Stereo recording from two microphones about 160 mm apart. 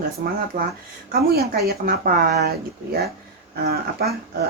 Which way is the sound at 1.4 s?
75° right (ahead or behind).